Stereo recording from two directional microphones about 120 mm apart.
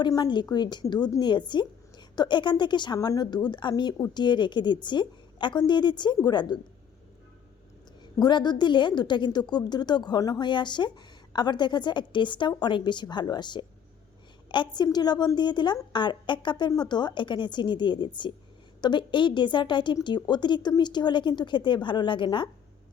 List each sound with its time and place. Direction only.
0.0 s a woman's voice: 35° left (ahead or behind)
8.2 s a woman's voice: 35° left (ahead or behind)